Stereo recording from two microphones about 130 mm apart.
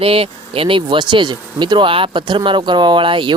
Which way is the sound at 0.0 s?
45° right (ahead or behind).